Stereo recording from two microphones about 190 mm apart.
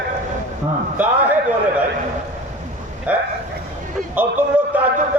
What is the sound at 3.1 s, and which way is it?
Speech, 5° right (ahead or behind).